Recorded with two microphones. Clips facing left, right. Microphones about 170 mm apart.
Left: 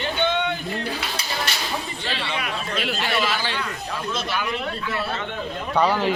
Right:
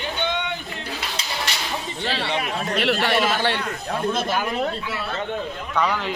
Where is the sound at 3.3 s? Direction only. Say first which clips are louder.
Right 4 dB; 55° right (ahead or behind).